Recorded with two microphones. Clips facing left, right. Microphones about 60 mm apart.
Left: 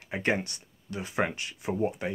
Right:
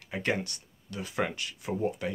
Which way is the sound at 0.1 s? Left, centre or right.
Left.